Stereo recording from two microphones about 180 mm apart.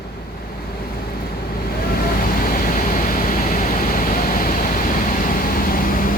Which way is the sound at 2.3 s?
55° left (ahead or behind).